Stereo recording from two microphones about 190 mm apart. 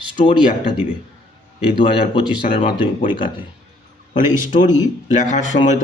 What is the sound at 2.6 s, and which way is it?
Speech, 30° left (ahead or behind).